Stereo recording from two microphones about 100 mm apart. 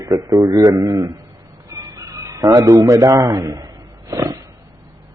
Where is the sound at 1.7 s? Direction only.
35° right (ahead or behind).